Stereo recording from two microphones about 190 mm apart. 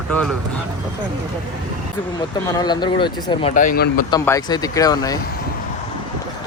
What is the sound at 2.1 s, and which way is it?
Speech, 20° left (ahead or behind).